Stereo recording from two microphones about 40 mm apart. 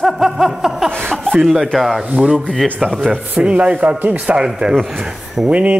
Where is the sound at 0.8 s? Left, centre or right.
Centre.